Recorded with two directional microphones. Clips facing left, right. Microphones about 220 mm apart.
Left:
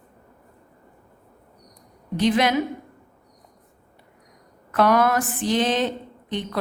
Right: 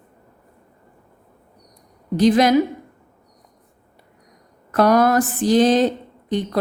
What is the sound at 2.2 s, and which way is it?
Speech, 40° right (ahead or behind).